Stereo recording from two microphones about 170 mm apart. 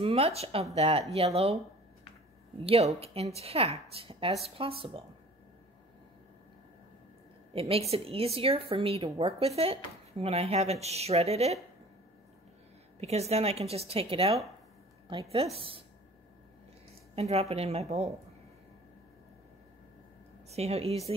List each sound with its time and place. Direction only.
0.0 s speech: 35° right (ahead or behind)
2.6 s speech: 35° right (ahead or behind)
7.5 s speech: 35° right (ahead or behind)
13.0 s speech: 40° right (ahead or behind)
17.1 s speech: 35° right (ahead or behind)
20.4 s speech: 40° right (ahead or behind)